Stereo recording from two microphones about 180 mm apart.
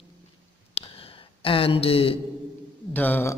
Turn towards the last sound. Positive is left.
turn(degrees=10)  # may be behind; listen again after turning